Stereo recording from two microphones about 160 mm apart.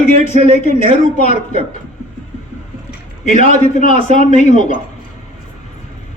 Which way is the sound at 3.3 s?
50° left (ahead or behind).